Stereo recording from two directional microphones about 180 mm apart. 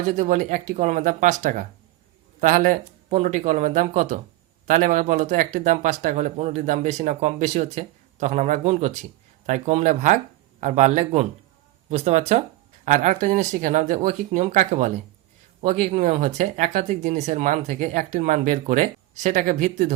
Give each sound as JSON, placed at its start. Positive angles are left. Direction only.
{"t": 0.1, "sound": "speech", "side_deg": -40}